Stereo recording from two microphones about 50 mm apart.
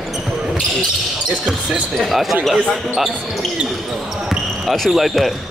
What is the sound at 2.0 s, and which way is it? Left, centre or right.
Speech, centre.